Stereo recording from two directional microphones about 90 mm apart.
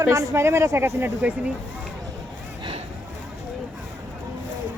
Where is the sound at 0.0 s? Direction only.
35° right (ahead or behind).